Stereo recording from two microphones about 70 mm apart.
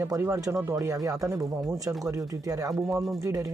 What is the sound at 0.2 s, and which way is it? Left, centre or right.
Speech, right.